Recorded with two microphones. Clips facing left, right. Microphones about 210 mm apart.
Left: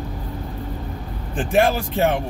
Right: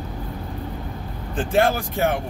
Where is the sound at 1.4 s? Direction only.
20° left (ahead or behind).